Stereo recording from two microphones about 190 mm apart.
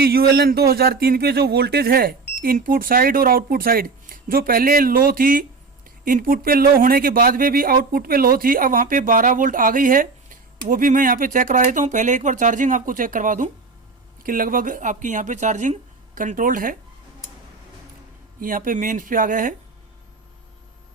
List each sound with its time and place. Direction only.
0.0 s speech: 55° right (ahead or behind)
18.3 s speech: 45° right (ahead or behind)